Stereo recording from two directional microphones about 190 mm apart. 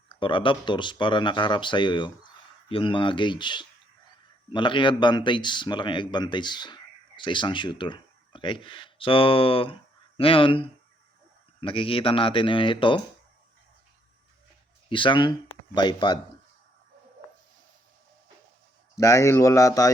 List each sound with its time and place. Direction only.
0.1 s speech: 25° left (ahead or behind)
14.8 s speech: 25° left (ahead or behind)
18.9 s speech: 15° left (ahead or behind)